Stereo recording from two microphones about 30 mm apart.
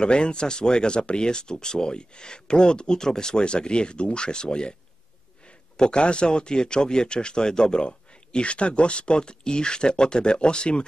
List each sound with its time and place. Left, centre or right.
0.0 s speech: left
3.0 s speech: left
5.8 s speech: left